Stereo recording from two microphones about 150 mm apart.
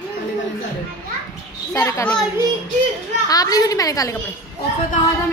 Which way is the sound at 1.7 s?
20° left (ahead or behind).